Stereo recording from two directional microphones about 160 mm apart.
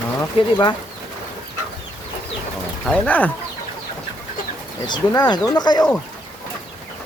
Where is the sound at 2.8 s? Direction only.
10° left (ahead or behind).